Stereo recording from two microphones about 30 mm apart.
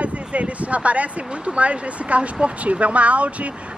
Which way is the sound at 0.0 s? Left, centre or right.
Right.